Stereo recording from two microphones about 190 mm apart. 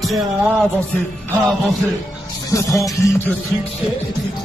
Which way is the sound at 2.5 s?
15° left (ahead or behind).